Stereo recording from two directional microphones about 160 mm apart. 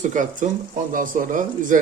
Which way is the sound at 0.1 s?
55° right (ahead or behind).